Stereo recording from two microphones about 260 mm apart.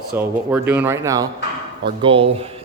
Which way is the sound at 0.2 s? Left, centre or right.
Centre.